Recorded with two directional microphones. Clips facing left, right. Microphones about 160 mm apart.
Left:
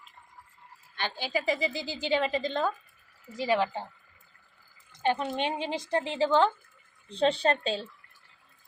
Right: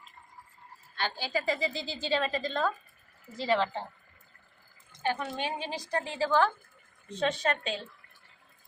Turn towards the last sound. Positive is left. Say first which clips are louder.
# left 4 dB
turn(degrees=30)  # may be behind; listen again after turning